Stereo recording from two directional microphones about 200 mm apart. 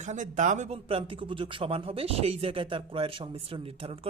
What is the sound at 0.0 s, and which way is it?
A man's voice, 35° right (ahead or behind).